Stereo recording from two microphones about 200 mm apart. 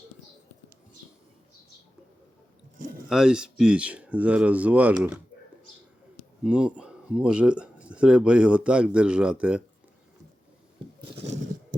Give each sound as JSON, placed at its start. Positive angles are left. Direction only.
{"t": 3.1, "sound": "speech", "side_deg": -5}
{"t": 6.4, "sound": "speech", "side_deg": -5}
{"t": 11.1, "sound": "a sound", "side_deg": -35}